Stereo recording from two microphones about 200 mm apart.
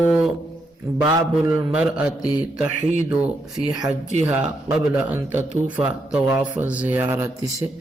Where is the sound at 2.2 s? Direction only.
20° left (ahead or behind).